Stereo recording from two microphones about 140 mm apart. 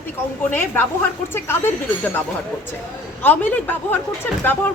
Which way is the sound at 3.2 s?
15° left (ahead or behind).